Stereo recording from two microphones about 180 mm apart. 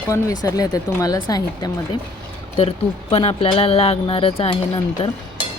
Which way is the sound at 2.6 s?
35° left (ahead or behind).